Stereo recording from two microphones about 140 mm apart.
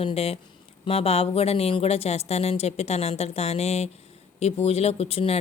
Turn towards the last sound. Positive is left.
turn(degrees=45)  # may be behind; listen again after turning